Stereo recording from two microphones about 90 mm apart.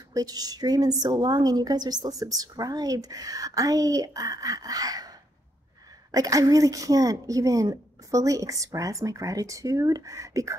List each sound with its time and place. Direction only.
0.1 s a woman's voice: 45° right (ahead or behind)
6.1 s a woman's voice: 40° right (ahead or behind)